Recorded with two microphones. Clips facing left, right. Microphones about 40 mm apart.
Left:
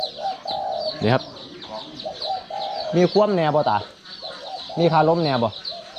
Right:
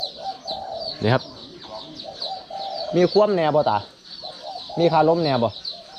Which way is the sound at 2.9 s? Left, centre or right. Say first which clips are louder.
Right 1 dB; centre.